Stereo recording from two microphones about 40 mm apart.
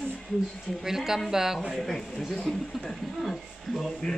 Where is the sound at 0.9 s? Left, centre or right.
Centre.